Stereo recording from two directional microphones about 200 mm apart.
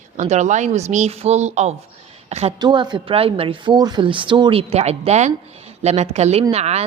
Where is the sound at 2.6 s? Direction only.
20° right (ahead or behind).